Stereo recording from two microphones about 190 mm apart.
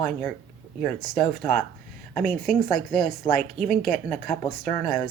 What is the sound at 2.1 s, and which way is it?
Speech, centre (ahead or behind).